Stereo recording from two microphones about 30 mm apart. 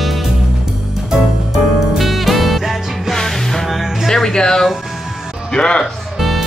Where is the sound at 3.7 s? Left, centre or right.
Centre.